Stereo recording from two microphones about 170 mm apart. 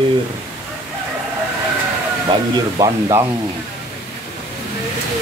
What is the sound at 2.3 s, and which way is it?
Speech, 25° right (ahead or behind).